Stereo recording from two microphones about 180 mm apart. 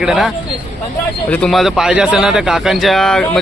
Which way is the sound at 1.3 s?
5° left (ahead or behind).